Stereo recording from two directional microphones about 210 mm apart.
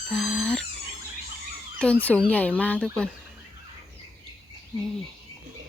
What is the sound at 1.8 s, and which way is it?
Speech, 5° left (ahead or behind).